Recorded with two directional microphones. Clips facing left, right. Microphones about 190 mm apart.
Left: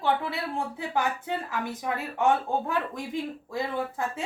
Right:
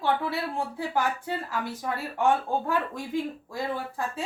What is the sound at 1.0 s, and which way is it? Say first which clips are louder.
Speech: even; 20° left (ahead or behind).